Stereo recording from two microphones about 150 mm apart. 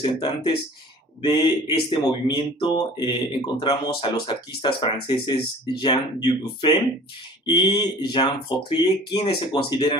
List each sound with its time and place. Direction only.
0.0 s speech: 35° left (ahead or behind)